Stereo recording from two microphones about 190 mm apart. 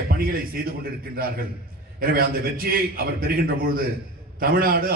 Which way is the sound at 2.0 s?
50° right (ahead or behind).